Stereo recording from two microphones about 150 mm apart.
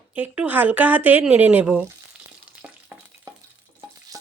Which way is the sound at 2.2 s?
15° right (ahead or behind).